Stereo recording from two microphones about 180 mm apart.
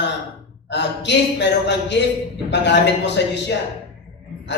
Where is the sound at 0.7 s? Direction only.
75° left (ahead or behind).